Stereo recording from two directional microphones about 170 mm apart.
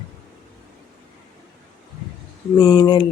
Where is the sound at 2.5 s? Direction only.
25° left (ahead or behind).